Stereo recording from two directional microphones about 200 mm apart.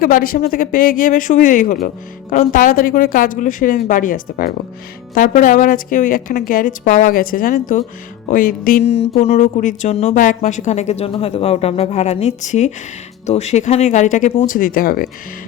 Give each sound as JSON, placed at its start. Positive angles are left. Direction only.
{"t": 0.0, "sound": "a woman's voice", "side_deg": 45}